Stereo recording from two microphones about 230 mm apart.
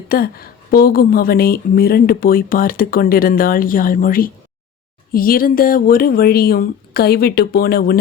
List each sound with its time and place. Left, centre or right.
0.1 s a woman's voice: left